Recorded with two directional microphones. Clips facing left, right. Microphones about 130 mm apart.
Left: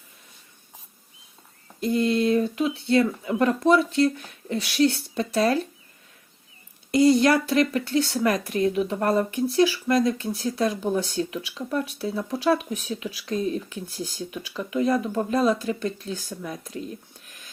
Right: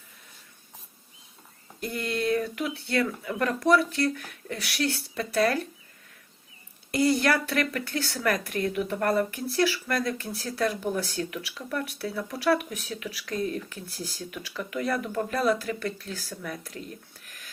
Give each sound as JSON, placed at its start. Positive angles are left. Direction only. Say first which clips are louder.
{"t": 1.8, "sound": "speech", "louder": "left 8 dB", "side_deg": 20}
{"t": 6.9, "sound": "speech", "louder": "left 6 dB", "side_deg": 20}